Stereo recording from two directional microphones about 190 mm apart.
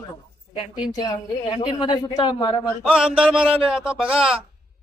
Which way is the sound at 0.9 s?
20° left (ahead or behind).